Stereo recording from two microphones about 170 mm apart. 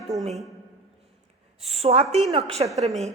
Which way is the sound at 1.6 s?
35° right (ahead or behind).